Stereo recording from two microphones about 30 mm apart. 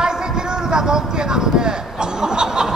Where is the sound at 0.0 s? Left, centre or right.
Right.